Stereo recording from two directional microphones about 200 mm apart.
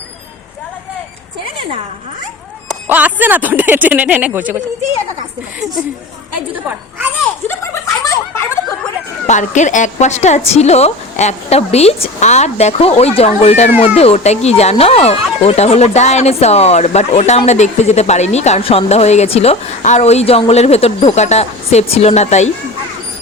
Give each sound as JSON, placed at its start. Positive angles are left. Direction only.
{"t": 2.8, "sound": "speech", "side_deg": -10}
{"t": 7.4, "sound": "snicker", "side_deg": 15}
{"t": 9.2, "sound": "a woman's voice", "side_deg": 35}